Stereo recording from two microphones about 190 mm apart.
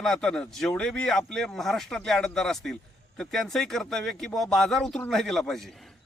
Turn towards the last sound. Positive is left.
turn(degrees=0)  # may be behind; listen again after turning